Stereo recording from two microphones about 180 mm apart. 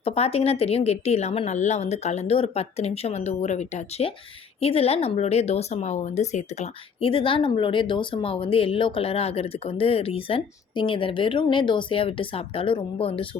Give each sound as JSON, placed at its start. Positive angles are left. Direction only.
{"t": 0.0, "sound": "speech", "side_deg": 35}